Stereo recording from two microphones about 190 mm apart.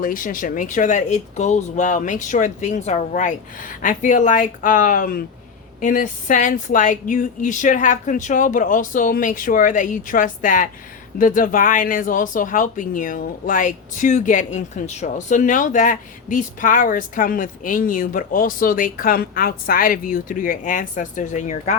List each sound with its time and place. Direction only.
0.0 s speech: 45° left (ahead or behind)